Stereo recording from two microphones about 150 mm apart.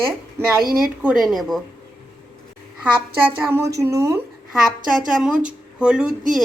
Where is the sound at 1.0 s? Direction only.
Centre (ahead or behind).